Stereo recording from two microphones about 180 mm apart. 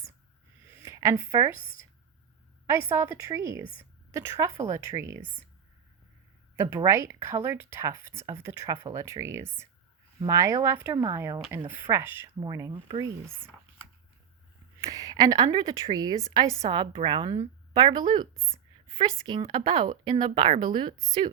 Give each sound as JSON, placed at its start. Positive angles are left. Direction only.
{"t": 0.8, "sound": "speech", "side_deg": -15}
{"t": 2.9, "sound": "speech", "side_deg": -15}
{"t": 6.6, "sound": "speech", "side_deg": -15}
{"t": 14.8, "sound": "a woman's voice", "side_deg": -20}